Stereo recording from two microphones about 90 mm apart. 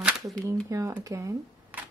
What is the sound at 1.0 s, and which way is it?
Speech, 35° right (ahead or behind).